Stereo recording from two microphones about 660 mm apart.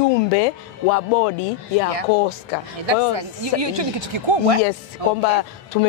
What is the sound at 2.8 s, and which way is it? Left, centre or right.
Speech, right.